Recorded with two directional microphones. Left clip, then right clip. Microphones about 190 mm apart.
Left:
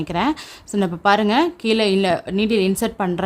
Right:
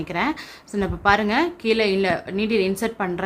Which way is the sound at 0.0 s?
45° left (ahead or behind).